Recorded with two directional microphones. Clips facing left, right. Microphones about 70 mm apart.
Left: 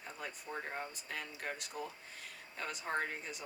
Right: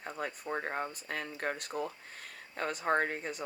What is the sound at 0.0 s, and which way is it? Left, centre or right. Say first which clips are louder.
Speech: right 7 dB; right.